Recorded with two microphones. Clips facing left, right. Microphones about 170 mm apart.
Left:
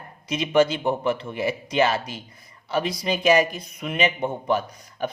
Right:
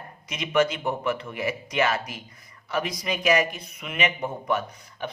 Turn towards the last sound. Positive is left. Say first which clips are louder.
# left 4 dB
turn(degrees=35)  # may be behind; listen again after turning